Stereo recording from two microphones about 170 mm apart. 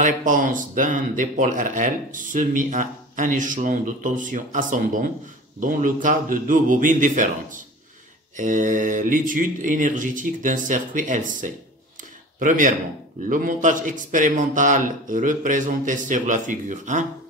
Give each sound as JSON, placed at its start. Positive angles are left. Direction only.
{"t": 0.0, "sound": "speech", "side_deg": -50}